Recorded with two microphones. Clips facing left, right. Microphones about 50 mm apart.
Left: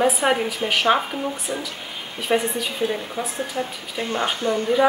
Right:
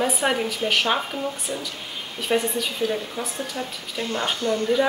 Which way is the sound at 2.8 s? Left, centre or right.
Left.